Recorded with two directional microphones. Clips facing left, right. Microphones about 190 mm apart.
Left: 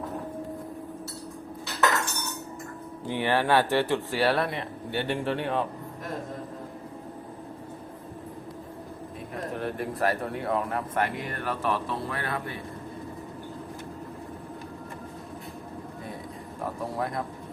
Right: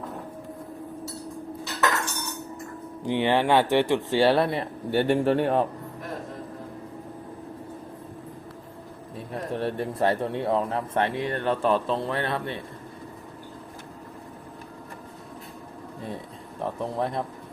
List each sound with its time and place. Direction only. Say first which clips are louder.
3.0 s speech: right 3 dB; 15° right (ahead or behind)
4.9 s speech: right 7 dB; 45° right (ahead or behind)
9.6 s speech: right 3 dB; 30° right (ahead or behind)
17.0 s speech: right 3 dB; 25° right (ahead or behind)